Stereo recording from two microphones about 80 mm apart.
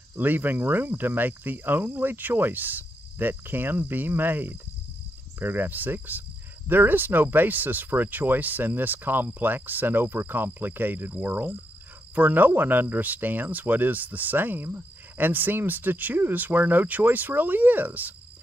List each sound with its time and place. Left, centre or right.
0.1 s speech: right